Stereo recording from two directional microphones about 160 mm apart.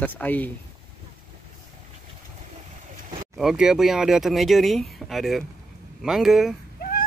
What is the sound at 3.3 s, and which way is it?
Speech, centre (ahead or behind).